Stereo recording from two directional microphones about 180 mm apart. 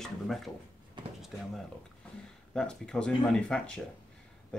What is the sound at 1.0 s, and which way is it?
Drawer open or close, 25° right (ahead or behind).